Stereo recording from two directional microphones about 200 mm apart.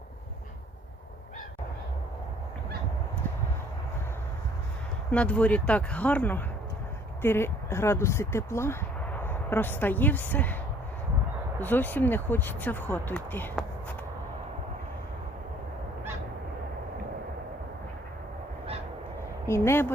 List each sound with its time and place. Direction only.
5.1 s speech: 5° left (ahead or behind)
11.6 s speech: 10° left (ahead or behind)
19.5 s speech: 15° left (ahead or behind)